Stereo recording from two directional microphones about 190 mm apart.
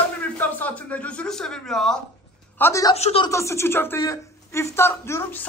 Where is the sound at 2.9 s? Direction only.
30° left (ahead or behind).